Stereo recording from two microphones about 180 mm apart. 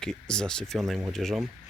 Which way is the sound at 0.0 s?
5° left (ahead or behind).